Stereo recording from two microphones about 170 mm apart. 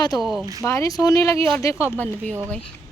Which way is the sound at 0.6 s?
20° left (ahead or behind).